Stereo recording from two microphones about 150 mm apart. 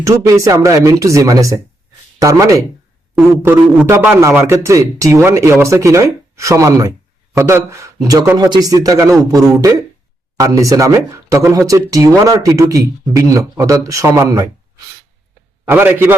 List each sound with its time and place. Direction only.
0.0 s a man's voice: 20° right (ahead or behind)
15.7 s a man's voice: 15° right (ahead or behind)